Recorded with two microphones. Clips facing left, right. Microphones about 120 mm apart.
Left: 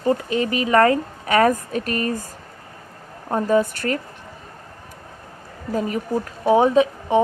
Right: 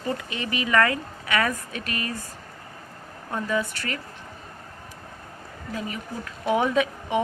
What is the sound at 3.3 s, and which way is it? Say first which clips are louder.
Speech: left 8 dB; 40° left (ahead or behind).